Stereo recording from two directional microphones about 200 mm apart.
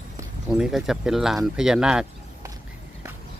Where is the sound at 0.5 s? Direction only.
5° right (ahead or behind).